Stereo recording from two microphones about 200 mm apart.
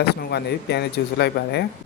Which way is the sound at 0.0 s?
55° left (ahead or behind).